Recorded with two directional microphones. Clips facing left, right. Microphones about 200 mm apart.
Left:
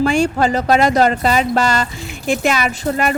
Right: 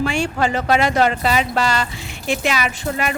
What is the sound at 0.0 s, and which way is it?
Speech, 40° left (ahead or behind).